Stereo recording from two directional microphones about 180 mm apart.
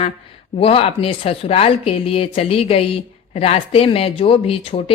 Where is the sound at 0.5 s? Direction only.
30° left (ahead or behind).